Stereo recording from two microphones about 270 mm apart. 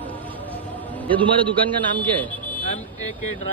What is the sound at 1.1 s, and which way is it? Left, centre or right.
Speech, centre.